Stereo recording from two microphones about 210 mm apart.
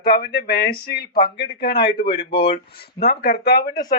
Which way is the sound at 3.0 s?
50° left (ahead or behind).